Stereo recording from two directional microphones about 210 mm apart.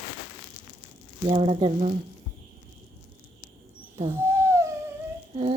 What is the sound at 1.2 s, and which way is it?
Speech, 25° right (ahead or behind).